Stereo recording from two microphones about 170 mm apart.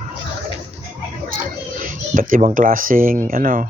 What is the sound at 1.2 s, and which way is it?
A child's voice, 55° right (ahead or behind).